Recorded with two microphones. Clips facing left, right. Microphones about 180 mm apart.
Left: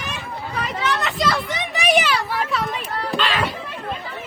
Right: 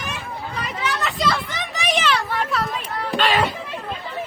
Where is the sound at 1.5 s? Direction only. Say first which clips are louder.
Left 5 dB; 10° left (ahead or behind).